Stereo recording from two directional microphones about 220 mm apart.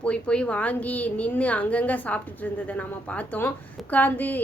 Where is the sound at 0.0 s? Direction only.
5° left (ahead or behind).